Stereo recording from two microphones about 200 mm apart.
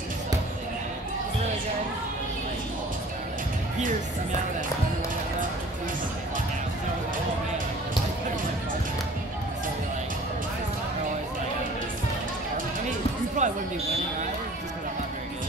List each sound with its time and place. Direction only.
13.4 s speech: 40° right (ahead or behind)